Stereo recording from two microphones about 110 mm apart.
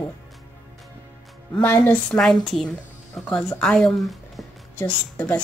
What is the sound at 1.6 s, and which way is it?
Speech, 20° left (ahead or behind).